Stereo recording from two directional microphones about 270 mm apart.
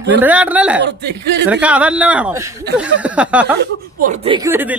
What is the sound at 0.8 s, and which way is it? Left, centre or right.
Speech, right.